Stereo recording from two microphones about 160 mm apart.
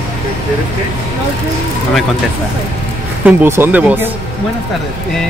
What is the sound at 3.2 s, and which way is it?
Speech, 15° right (ahead or behind).